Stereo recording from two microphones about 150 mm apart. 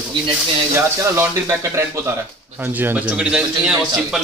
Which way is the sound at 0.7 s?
15° right (ahead or behind).